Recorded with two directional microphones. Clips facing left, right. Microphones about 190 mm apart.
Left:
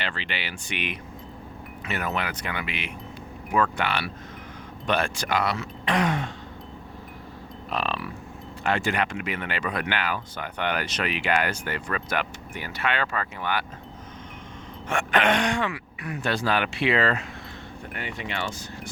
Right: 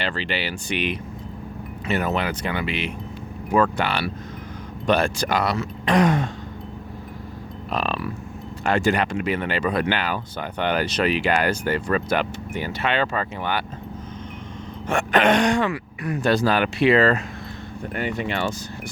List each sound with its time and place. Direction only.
0.0 s speech: 35° right (ahead or behind)
7.7 s speech: 40° right (ahead or behind)
14.8 s speech: 40° right (ahead or behind)